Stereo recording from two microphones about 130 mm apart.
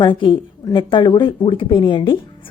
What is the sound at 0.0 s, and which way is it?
A woman's voice, 40° left (ahead or behind).